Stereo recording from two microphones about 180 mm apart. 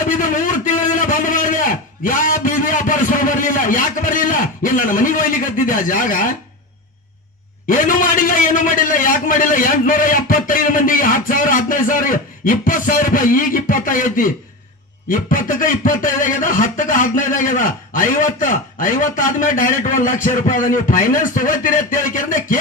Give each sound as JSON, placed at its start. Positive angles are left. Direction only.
{"t": 0.2, "sound": "a sound", "side_deg": 45}
{"t": 2.0, "sound": "speech", "side_deg": 50}
{"t": 7.7, "sound": "speech", "side_deg": 50}